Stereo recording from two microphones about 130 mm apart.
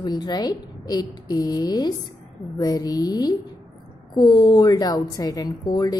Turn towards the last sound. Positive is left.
turn(degrees=30)  # may be behind; listen again after turning